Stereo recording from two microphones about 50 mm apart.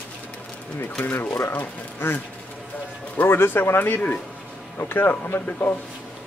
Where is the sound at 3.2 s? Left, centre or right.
Left.